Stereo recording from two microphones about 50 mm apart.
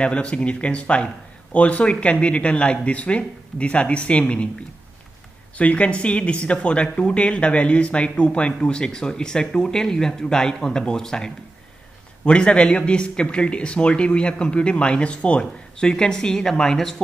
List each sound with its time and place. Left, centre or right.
0.0 s speech: left
5.6 s speech: left; by 16.9 s centre